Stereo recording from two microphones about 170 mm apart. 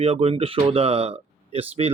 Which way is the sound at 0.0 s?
35° right (ahead or behind).